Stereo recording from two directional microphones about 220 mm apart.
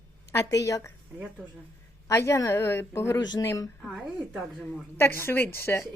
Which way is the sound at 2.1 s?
15° left (ahead or behind).